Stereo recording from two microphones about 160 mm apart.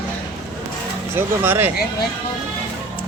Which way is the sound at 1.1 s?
15° right (ahead or behind).